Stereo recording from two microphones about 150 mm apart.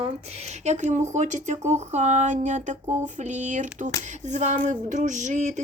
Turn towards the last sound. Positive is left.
turn(degrees=-55)  # may be behind; listen again after turning